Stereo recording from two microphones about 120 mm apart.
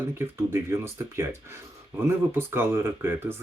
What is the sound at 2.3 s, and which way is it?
Speech, 20° right (ahead or behind).